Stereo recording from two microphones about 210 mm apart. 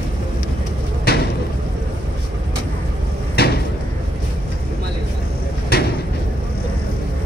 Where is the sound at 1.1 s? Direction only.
45° left (ahead or behind).